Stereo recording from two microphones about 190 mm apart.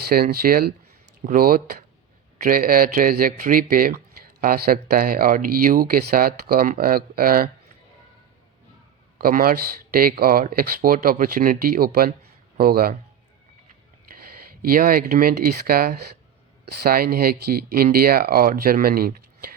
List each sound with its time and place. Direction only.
0.1 s speech: 50° right (ahead or behind)
9.1 s speech: 50° right (ahead or behind)
14.5 s speech: 50° right (ahead or behind)